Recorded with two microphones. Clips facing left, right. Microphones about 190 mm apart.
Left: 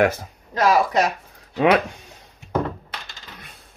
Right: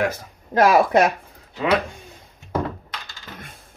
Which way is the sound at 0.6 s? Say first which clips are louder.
Right 3 dB; 55° right (ahead or behind).